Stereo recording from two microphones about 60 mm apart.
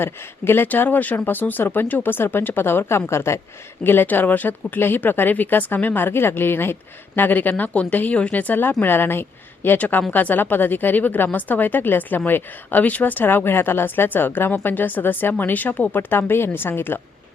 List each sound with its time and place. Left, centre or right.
0.0 s speech: left
0.7 s speech: left
3.8 s speech: left